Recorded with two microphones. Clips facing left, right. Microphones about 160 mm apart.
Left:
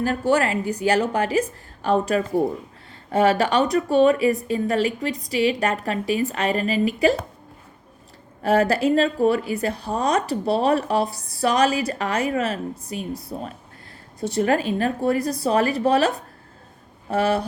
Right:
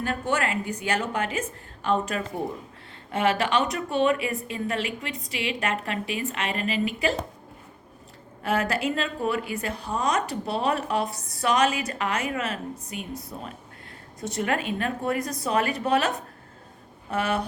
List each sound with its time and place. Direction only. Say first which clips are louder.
0.0 s speech: left 6 dB; 35° left (ahead or behind)
8.4 s speech: left 7 dB; 35° left (ahead or behind)